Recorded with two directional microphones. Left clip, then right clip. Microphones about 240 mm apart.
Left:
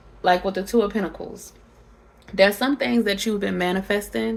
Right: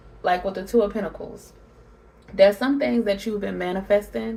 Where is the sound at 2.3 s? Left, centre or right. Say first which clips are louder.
Right 1 dB; left.